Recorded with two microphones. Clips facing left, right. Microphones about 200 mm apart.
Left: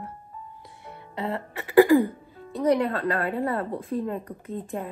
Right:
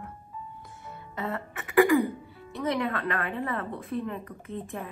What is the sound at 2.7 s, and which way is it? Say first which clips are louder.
A woman's voice: left 4 dB; 30° left (ahead or behind).